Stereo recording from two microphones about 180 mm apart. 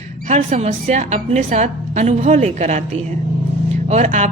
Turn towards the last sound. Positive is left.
turn(degrees=-40)  # may be behind; listen again after turning